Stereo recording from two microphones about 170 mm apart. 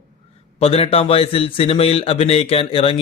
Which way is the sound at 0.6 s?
35° left (ahead or behind).